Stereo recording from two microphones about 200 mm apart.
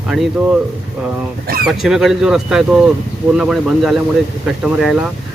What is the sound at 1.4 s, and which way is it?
Speech, 50° right (ahead or behind).